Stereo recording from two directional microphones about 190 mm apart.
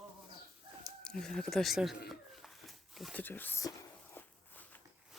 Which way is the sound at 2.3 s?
Centre (ahead or behind).